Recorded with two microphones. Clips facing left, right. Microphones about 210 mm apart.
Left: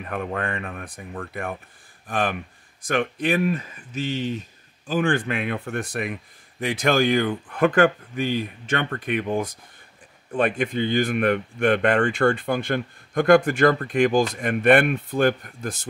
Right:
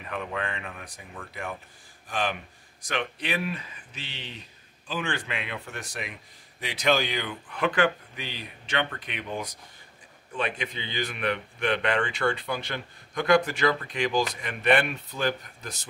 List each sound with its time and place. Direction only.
0.0 s a man's voice: 50° left (ahead or behind)